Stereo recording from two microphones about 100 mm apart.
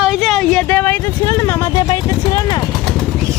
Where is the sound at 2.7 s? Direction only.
5° left (ahead or behind).